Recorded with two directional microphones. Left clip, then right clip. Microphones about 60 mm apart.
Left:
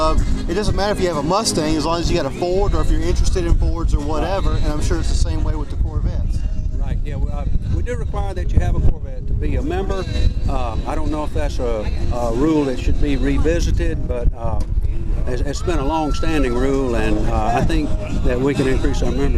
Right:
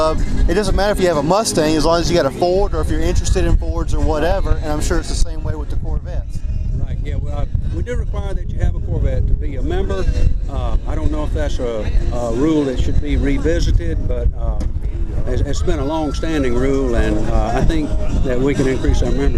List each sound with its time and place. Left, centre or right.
0.4 s speech: right
7.9 s speech: centre
18.0 s speech: left
18.3 s speech: centre